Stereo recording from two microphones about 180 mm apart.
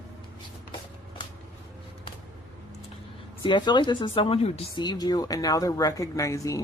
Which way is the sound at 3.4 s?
25° left (ahead or behind).